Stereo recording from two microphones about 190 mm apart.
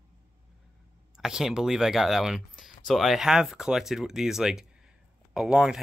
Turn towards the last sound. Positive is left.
turn(degrees=-5)  # may be behind; listen again after turning